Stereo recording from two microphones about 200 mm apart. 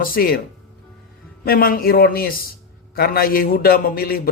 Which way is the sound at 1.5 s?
45° left (ahead or behind).